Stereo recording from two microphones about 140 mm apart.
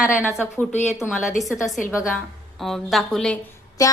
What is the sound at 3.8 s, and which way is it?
Speech, 25° left (ahead or behind).